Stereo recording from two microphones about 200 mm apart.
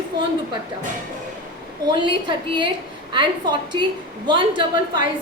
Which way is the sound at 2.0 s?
25° right (ahead or behind).